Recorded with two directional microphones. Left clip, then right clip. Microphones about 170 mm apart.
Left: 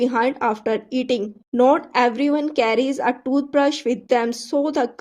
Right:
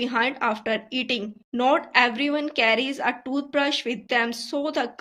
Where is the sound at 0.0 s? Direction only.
50° left (ahead or behind).